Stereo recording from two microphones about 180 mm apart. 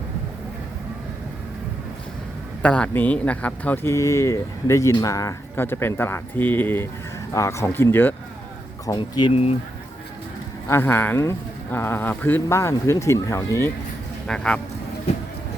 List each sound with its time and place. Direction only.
2.6 s speech: 5° left (ahead or behind)
8.9 s speech: 25° left (ahead or behind)
10.7 s speech: 15° left (ahead or behind)
14.3 s speech: 5° left (ahead or behind)